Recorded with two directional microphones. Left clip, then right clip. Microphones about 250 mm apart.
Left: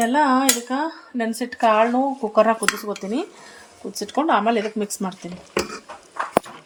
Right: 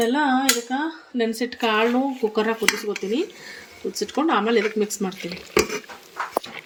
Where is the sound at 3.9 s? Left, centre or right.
Centre.